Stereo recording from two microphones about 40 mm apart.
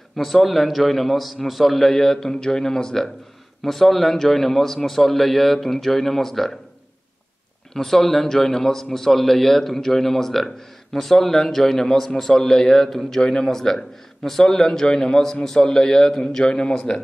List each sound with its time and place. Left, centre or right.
0.1 s a man's voice: centre
7.7 s a man's voice: centre